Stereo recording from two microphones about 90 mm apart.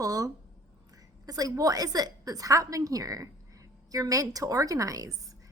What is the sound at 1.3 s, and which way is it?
A woman's voice, 40° right (ahead or behind).